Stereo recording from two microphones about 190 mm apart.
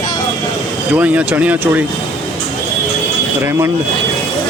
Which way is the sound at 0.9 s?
5° right (ahead or behind).